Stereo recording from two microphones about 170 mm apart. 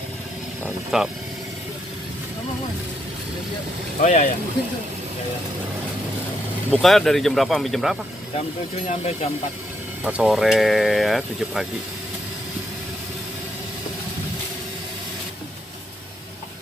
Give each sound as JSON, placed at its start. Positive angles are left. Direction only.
{"t": 0.9, "sound": "speech", "side_deg": -5}
{"t": 4.0, "sound": "speech", "side_deg": 45}
{"t": 6.7, "sound": "speech", "side_deg": 0}
{"t": 8.4, "sound": "speech", "side_deg": 40}
{"t": 10.0, "sound": "speech", "side_deg": -5}